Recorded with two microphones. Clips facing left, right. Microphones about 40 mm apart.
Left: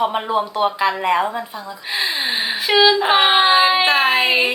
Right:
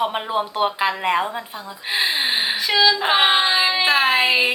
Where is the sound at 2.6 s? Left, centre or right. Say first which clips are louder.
Left 5 dB; centre.